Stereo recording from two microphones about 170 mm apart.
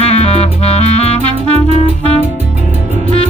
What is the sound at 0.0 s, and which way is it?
Music, 40° left (ahead or behind).